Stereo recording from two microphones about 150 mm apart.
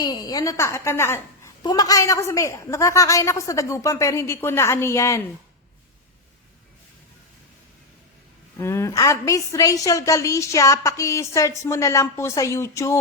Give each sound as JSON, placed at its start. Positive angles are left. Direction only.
{"t": 0.0, "sound": "a woman's voice", "side_deg": 25}
{"t": 8.5, "sound": "a woman's voice", "side_deg": 20}